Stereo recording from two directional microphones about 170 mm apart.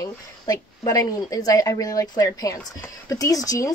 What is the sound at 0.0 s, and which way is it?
Speech, 20° left (ahead or behind).